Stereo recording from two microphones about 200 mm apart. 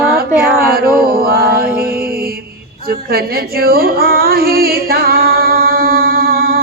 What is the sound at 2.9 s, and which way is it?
Female singing, 50° right (ahead or behind).